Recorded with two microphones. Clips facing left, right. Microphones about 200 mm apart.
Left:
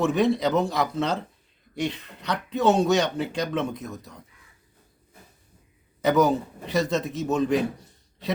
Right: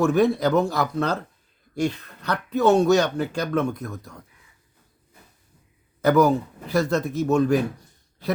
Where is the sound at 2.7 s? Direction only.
Centre (ahead or behind).